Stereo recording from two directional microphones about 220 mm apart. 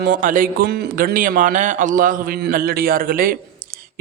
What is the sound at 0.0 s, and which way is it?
A man's voice, 40° right (ahead or behind).